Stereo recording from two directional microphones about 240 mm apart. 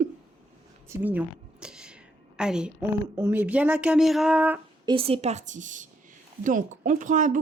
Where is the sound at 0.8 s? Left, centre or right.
Centre.